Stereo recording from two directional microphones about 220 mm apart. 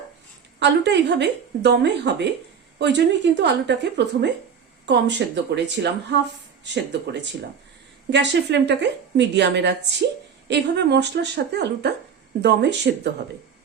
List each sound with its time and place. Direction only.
0.6 s a woman's voice: 55° right (ahead or behind)
8.1 s a woman's voice: 50° right (ahead or behind)